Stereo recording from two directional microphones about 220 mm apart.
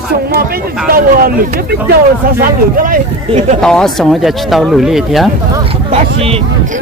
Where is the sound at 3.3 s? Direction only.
25° right (ahead or behind).